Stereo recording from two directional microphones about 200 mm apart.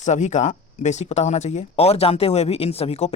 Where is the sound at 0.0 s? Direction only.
35° left (ahead or behind).